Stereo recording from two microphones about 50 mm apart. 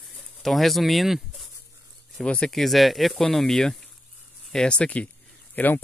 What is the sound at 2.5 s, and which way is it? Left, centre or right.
Speech, centre.